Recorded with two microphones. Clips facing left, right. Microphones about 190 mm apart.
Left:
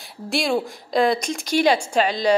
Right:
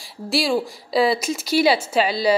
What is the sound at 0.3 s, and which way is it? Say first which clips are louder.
A woman's voice: right 1 dB; centre (ahead or behind).